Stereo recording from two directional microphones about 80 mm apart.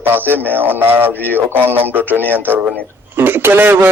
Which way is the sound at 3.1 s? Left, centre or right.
Right.